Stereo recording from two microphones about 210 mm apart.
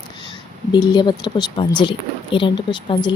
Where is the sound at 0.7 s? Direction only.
20° left (ahead or behind).